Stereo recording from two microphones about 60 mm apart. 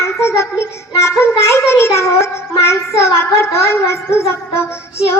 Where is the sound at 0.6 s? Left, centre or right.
Left.